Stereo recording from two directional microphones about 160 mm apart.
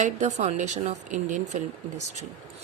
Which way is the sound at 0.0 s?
45° right (ahead or behind).